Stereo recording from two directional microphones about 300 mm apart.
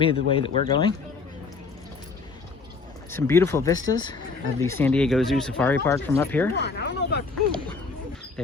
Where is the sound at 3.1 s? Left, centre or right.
Centre.